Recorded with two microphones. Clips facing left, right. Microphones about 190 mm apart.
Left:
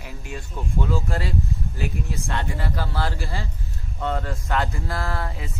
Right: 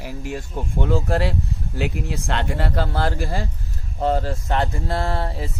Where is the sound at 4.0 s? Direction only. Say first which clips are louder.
Right 6 dB; 30° right (ahead or behind).